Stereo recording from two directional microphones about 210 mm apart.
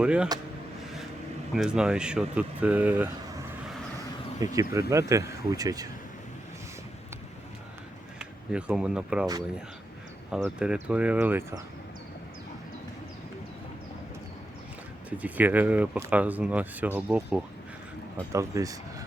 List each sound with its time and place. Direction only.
0.0 s speech: 5° right (ahead or behind)
1.5 s speech: 5° right (ahead or behind)
8.2 s speech: 5° right (ahead or behind)
10.4 s speech: 5° right (ahead or behind)
15.2 s speech: 10° right (ahead or behind)